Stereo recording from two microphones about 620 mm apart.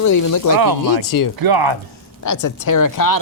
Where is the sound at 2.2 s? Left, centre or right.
Left.